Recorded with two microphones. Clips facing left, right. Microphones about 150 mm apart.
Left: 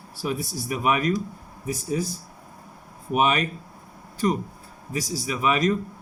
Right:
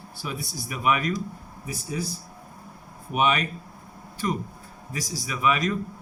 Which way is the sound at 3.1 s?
40° left (ahead or behind).